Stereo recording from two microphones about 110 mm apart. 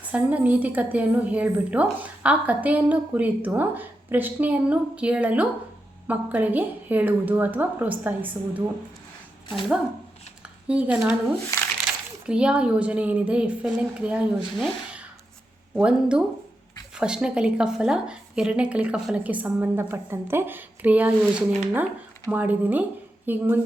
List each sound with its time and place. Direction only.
0.1 s a woman's voice: 15° right (ahead or behind)
10.4 s a woman's voice: 10° right (ahead or behind)
12.2 s a woman's voice: 10° right (ahead or behind)
15.7 s a woman's voice: 10° right (ahead or behind)